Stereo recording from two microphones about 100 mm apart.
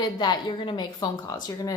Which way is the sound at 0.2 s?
55° left (ahead or behind).